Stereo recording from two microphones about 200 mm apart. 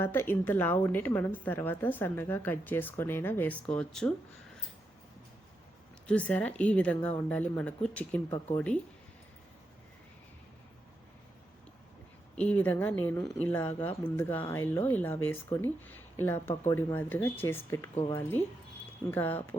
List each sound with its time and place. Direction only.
0.0 s a woman's voice: 10° left (ahead or behind)
6.1 s a woman's voice: 5° left (ahead or behind)
12.4 s a woman's voice: 5° left (ahead or behind)